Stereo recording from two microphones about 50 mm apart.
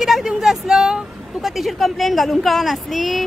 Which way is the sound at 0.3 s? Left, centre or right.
Centre.